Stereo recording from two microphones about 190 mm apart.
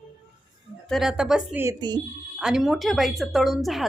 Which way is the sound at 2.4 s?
5° right (ahead or behind).